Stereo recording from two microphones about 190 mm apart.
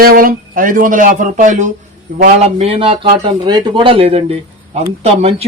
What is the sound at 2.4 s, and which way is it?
Speech, 30° right (ahead or behind).